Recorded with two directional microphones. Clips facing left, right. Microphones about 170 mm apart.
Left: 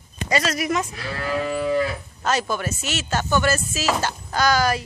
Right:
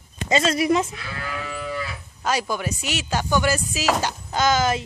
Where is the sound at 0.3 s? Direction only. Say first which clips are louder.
Right 3 dB; 25° right (ahead or behind).